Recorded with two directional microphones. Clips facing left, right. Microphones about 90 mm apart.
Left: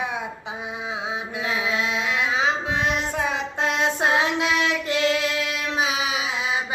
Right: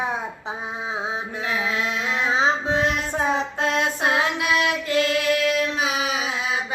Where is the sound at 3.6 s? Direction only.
25° left (ahead or behind).